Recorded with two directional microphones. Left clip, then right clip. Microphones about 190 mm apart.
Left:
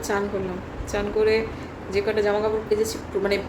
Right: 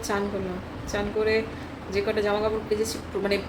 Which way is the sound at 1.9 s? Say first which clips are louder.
Left 3 dB; 10° right (ahead or behind).